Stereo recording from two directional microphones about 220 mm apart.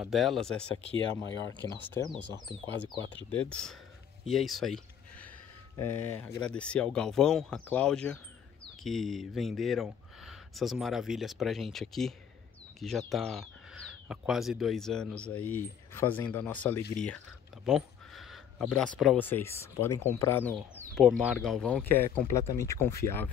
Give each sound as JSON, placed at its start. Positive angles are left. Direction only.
{"t": 0.0, "sound": "speech", "side_deg": 0}
{"t": 1.6, "sound": "speech", "side_deg": 15}
{"t": 3.3, "sound": "speech", "side_deg": 5}
{"t": 17.6, "sound": "a sound", "side_deg": 0}
{"t": 18.9, "sound": "speech", "side_deg": 5}
{"t": 20.5, "sound": "speech", "side_deg": 0}